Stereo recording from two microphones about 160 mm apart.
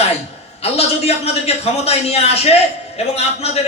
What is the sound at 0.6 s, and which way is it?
A man's voice, 40° left (ahead or behind).